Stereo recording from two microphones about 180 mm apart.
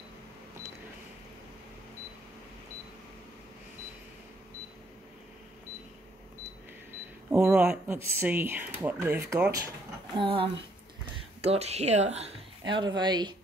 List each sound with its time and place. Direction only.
7.2 s speech: 5° right (ahead or behind)
10.1 s speech: 30° right (ahead or behind)
12.6 s speech: 25° right (ahead or behind)